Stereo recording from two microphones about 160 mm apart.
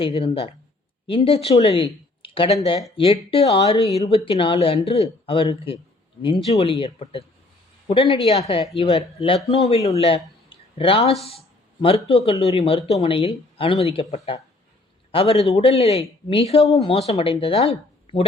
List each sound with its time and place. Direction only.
0.0 s speech: 35° left (ahead or behind)